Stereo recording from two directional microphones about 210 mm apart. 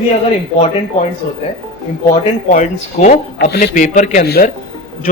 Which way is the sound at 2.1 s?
35° left (ahead or behind).